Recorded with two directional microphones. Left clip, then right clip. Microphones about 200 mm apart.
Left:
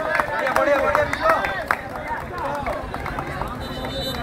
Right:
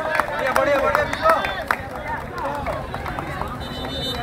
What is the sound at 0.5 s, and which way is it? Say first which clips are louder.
Run: even; 45° right (ahead or behind).